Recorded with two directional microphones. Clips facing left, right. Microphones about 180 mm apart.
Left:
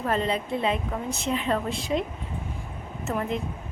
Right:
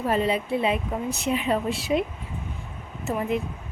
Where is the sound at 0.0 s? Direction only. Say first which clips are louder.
Right 2 dB; 10° right (ahead or behind).